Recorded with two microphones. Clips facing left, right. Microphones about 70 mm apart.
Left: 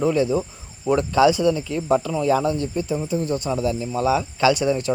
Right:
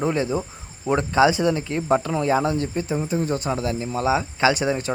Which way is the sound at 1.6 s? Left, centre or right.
Right.